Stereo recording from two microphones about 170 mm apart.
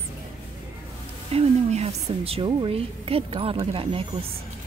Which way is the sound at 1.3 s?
35° right (ahead or behind).